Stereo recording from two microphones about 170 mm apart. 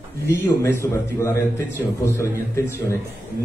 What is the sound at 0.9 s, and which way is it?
A man's voice, 15° left (ahead or behind).